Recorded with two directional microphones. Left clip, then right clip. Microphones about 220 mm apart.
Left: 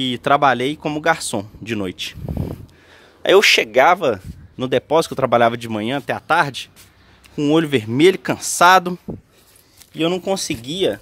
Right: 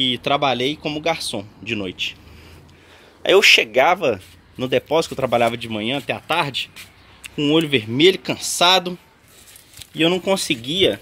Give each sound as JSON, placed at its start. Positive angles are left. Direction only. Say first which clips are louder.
{"t": 0.0, "sound": "speech", "louder": "left 3 dB", "side_deg": 20}
{"t": 1.9, "sound": "speech", "louder": "right 2 dB", "side_deg": 75}
{"t": 3.2, "sound": "speech", "louder": "even", "side_deg": 25}
{"t": 9.9, "sound": "speech", "louder": "right 2 dB", "side_deg": 10}